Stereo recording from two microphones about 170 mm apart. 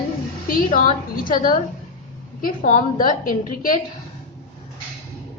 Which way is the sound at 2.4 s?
50° left (ahead or behind).